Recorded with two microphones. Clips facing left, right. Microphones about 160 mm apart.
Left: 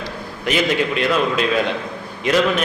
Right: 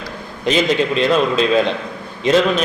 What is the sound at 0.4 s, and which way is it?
A man's voice, 25° right (ahead or behind).